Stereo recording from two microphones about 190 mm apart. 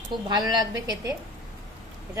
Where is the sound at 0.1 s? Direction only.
20° right (ahead or behind).